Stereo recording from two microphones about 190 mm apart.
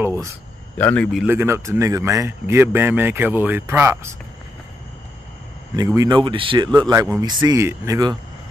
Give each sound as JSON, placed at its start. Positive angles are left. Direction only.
{"t": 0.0, "sound": "cricket", "side_deg": -15}
{"t": 0.7, "sound": "a man's voice", "side_deg": 10}
{"t": 1.2, "sound": "a man's voice", "side_deg": -10}
{"t": 5.8, "sound": "a man's voice", "side_deg": -20}